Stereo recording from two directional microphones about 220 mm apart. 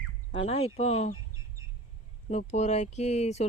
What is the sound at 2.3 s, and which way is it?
Speech, 30° left (ahead or behind).